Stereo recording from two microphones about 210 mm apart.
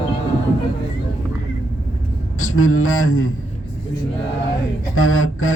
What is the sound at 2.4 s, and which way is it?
Speech, 75° left (ahead or behind).